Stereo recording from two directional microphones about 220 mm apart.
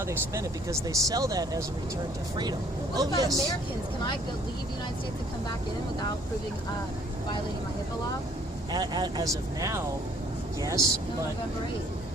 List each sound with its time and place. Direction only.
0.1 s speech: 15° right (ahead or behind)
8.7 s a man's voice: 20° right (ahead or behind)